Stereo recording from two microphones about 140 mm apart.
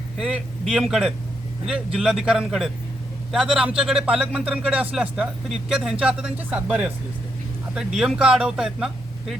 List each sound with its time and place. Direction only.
0.2 s a man's voice: 5° right (ahead or behind)